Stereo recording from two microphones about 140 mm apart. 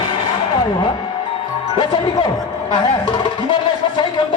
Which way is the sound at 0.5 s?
35° left (ahead or behind).